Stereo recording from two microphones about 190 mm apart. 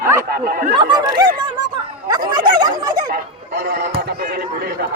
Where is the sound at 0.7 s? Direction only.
25° right (ahead or behind).